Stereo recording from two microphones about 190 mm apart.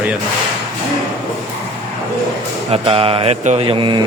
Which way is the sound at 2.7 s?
30° right (ahead or behind).